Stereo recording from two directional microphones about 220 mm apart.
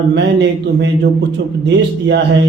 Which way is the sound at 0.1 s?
50° right (ahead or behind).